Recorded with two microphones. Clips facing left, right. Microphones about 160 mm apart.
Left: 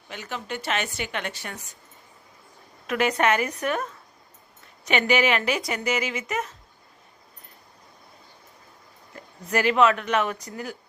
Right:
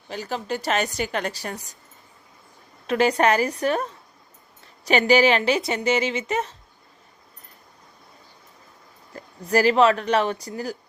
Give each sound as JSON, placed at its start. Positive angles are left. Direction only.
{"t": 0.1, "sound": "a woman's voice", "side_deg": -35}
{"t": 2.8, "sound": "a woman's voice", "side_deg": -30}
{"t": 9.1, "sound": "a woman's voice", "side_deg": -35}